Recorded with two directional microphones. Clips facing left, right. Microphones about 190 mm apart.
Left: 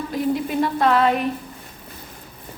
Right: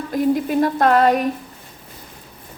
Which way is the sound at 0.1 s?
45° right (ahead or behind).